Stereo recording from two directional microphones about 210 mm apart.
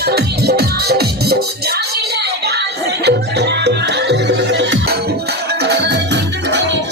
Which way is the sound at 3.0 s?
55° right (ahead or behind).